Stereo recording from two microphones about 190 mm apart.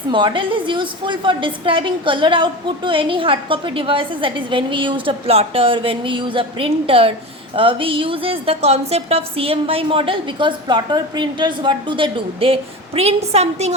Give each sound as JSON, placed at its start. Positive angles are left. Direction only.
{"t": 0.1, "sound": "a woman's voice", "side_deg": -25}